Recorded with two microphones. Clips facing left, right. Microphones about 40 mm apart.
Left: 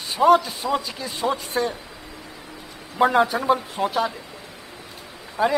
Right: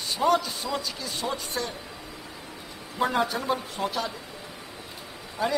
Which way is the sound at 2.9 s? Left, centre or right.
Left.